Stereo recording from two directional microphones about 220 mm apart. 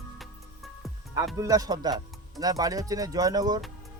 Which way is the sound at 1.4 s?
15° right (ahead or behind).